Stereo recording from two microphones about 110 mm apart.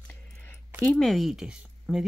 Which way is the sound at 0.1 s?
15° left (ahead or behind).